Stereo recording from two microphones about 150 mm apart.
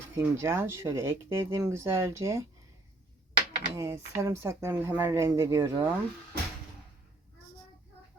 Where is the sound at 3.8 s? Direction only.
15° right (ahead or behind).